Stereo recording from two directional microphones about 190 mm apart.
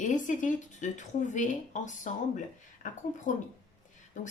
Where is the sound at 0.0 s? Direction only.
40° left (ahead or behind).